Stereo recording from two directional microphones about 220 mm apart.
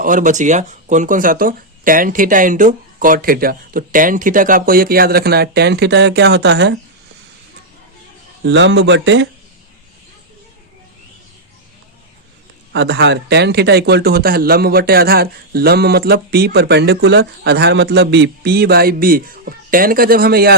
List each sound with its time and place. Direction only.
0.0 s speech: 35° right (ahead or behind)
8.4 s speech: 55° right (ahead or behind)
12.7 s speech: 50° right (ahead or behind)